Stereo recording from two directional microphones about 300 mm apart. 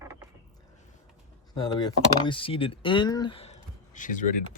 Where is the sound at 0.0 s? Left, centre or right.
Centre.